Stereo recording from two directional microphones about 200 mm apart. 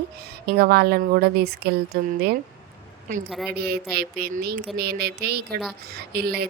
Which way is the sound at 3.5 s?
50° right (ahead or behind).